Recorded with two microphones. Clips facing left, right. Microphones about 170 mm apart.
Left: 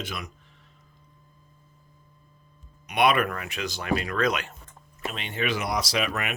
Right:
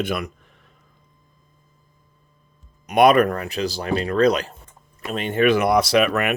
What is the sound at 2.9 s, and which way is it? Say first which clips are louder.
Speech: right 8 dB; 45° right (ahead or behind).